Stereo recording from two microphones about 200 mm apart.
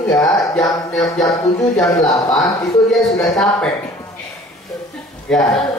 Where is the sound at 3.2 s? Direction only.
5° left (ahead or behind).